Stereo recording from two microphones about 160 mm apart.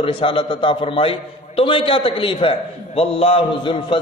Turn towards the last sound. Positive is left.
turn(degrees=35)  # may be behind; listen again after turning